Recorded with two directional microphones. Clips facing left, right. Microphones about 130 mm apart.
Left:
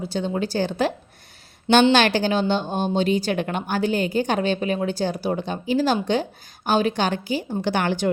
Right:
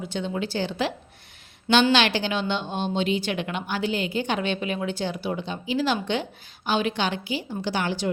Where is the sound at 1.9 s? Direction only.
45° left (ahead or behind).